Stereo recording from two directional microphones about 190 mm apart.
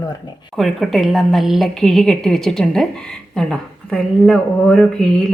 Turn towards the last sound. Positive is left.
turn(degrees=0)  # may be behind; listen again after turning